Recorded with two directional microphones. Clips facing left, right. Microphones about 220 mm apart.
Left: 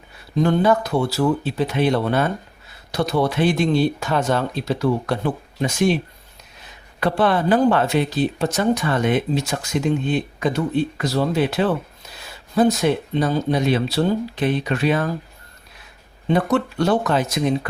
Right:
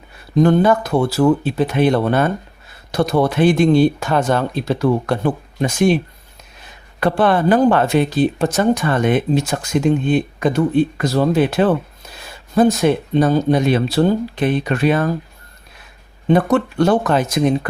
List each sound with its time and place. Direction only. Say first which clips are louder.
0.4 s speech: right 3 dB; 50° right (ahead or behind)
7.0 s speech: right 3 dB; 50° right (ahead or behind)
16.3 s speech: right 4 dB; 50° right (ahead or behind)